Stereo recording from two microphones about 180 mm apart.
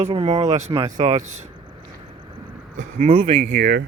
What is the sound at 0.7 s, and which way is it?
Speech, 20° right (ahead or behind).